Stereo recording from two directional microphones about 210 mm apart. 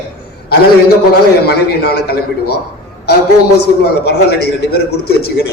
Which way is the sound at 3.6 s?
50° left (ahead or behind).